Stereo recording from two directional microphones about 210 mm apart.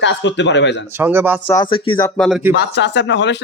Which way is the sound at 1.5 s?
20° left (ahead or behind).